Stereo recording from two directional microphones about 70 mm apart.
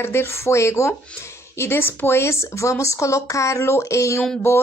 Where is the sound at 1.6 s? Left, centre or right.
Left.